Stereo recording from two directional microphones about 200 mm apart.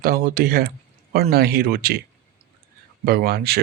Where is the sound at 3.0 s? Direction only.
50° right (ahead or behind).